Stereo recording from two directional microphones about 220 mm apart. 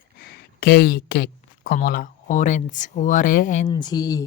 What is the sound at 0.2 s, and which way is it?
Speech, 45° left (ahead or behind).